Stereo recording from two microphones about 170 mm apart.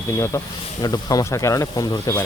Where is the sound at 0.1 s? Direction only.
15° left (ahead or behind).